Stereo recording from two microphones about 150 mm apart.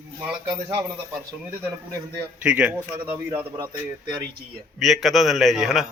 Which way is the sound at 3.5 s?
25° right (ahead or behind).